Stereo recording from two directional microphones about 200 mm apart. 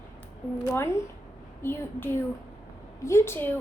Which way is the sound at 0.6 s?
15° left (ahead or behind).